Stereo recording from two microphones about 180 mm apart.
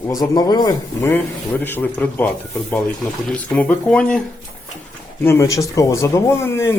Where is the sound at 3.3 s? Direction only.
10° left (ahead or behind).